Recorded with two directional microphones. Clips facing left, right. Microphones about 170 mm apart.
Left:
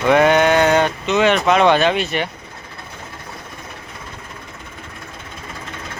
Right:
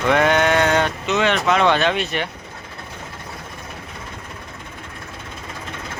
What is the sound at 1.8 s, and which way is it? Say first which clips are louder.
Speech: left 3 dB; centre (ahead or behind).